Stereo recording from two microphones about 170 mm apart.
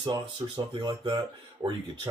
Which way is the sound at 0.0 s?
25° right (ahead or behind).